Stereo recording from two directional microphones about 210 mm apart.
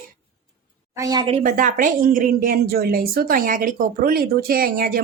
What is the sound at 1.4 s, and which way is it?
A woman's voice, 35° right (ahead or behind).